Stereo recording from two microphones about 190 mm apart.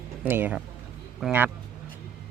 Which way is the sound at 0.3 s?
10° right (ahead or behind).